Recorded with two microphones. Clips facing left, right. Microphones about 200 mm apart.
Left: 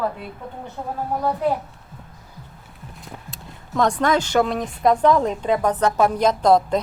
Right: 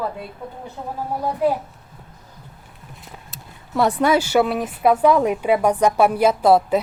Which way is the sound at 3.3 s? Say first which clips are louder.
Right 1 dB; 5° right (ahead or behind).